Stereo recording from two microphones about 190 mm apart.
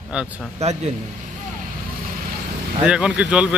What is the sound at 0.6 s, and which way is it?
Speech, 35° right (ahead or behind).